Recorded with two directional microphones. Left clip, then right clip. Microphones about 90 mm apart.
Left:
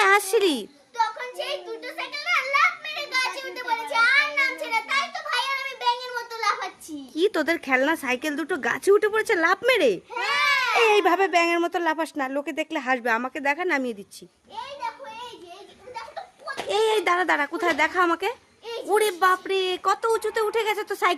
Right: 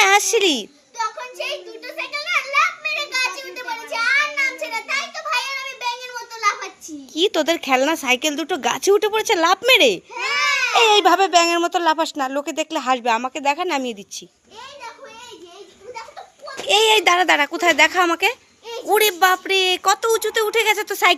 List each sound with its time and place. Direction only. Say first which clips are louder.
0.0 s a sound: right 4 dB; centre (ahead or behind)
2.1 s a sound: right 3 dB; 35° left (ahead or behind)
7.2 s speech: right 4 dB; 5° right (ahead or behind)
10.2 s baby cry: even; 35° left (ahead or behind)
10.8 s speech: right 7 dB; 5° right (ahead or behind)
16.6 s a woman's voice: right 7 dB; 20° right (ahead or behind)